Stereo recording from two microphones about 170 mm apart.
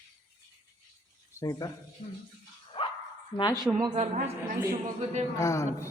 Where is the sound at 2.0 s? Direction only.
40° left (ahead or behind).